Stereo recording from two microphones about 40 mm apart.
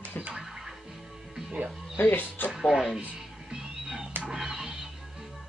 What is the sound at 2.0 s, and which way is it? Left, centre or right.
Speech, left.